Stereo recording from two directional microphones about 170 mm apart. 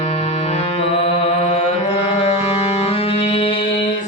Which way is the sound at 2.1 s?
35° left (ahead or behind).